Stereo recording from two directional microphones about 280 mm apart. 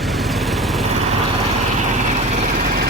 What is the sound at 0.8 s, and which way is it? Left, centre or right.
Vehicle, right.